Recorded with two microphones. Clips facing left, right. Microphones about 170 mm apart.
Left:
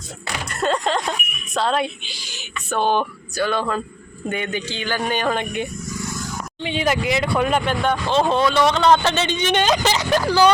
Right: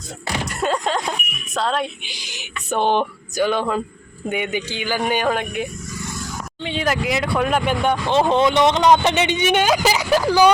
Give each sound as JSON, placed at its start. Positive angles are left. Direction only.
{"t": 0.4, "sound": "a man's voice", "side_deg": -5}
{"t": 2.0, "sound": "a man's voice", "side_deg": -15}
{"t": 6.6, "sound": "speech", "side_deg": 5}
{"t": 7.6, "sound": "a man's voice", "side_deg": -10}